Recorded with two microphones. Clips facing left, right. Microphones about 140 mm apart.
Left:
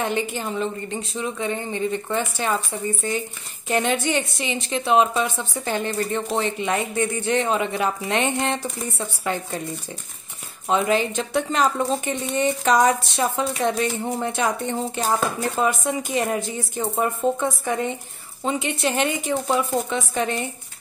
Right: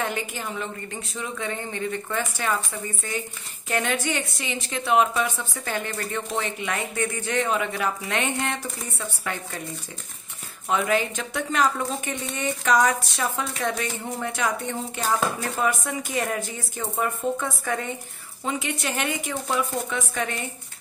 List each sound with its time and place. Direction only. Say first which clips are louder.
0.0 s a woman's voice: left 4 dB; 25° left (ahead or behind)
10.7 s a woman's voice: left 3 dB; 25° left (ahead or behind)